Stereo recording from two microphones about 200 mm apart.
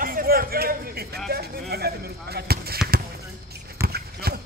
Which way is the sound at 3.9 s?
50° right (ahead or behind).